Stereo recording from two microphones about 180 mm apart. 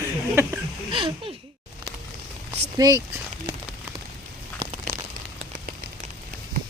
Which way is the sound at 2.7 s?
20° right (ahead or behind).